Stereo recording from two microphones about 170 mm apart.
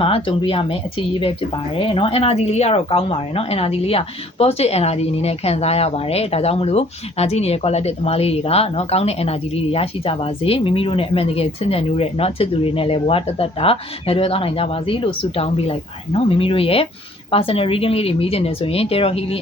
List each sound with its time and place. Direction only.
0.0 s speech: 30° left (ahead or behind)